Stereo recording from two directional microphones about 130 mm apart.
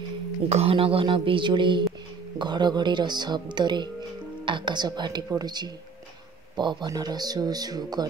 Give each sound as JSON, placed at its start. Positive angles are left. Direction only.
{"t": 0.5, "sound": "speech", "side_deg": -50}